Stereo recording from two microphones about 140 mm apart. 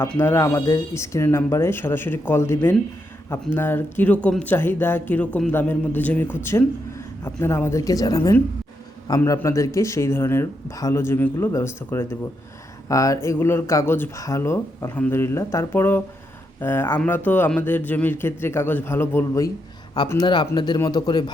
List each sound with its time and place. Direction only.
0.0 s speech: 15° left (ahead or behind)
20.1 s speech: 30° left (ahead or behind)